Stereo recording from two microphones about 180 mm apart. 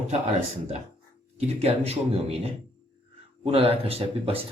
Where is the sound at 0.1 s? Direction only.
35° right (ahead or behind).